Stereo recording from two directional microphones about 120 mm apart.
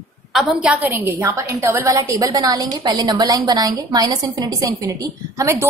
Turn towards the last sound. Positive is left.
turn(degrees=-25)  # may be behind; listen again after turning